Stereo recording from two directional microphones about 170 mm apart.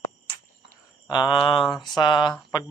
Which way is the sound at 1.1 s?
25° left (ahead or behind).